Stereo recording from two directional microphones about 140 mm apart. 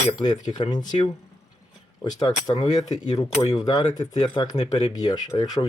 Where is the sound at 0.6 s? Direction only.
30° left (ahead or behind).